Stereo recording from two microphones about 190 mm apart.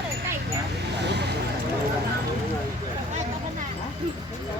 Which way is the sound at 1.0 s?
65° right (ahead or behind).